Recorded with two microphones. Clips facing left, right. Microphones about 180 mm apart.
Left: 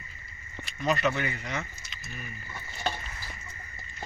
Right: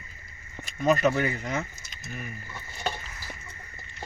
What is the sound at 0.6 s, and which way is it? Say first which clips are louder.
Speech: right 5 dB; 45° right (ahead or behind).